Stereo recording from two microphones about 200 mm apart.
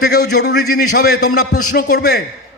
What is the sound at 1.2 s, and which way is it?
Speech, 90° left.